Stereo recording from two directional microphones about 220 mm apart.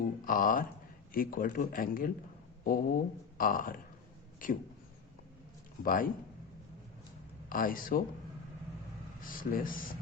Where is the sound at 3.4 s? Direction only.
40° left (ahead or behind).